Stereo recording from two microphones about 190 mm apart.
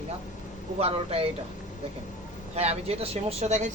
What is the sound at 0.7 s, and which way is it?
Speech, 30° right (ahead or behind).